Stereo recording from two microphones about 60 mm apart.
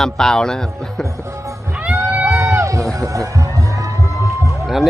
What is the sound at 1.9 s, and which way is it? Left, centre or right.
Music, right.